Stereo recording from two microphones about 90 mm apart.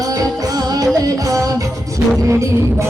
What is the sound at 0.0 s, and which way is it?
Music, 40° right (ahead or behind).